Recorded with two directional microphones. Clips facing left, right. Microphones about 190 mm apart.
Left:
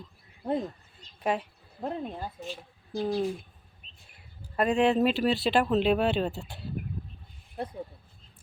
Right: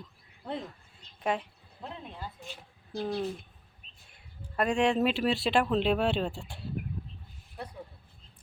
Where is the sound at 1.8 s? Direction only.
45° left (ahead or behind).